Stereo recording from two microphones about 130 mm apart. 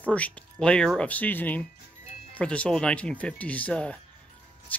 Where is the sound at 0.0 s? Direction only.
10° left (ahead or behind).